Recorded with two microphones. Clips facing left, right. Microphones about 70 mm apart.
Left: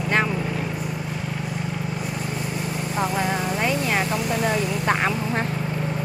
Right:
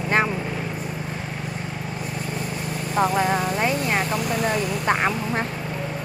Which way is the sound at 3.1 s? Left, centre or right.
Centre.